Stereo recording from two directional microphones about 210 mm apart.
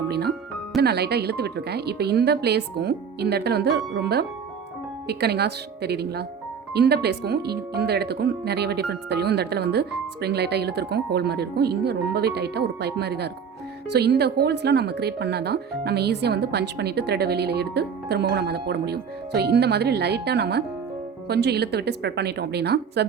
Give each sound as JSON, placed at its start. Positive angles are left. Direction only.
{"t": 0.1, "sound": "music", "side_deg": -50}
{"t": 0.8, "sound": "speech", "side_deg": -50}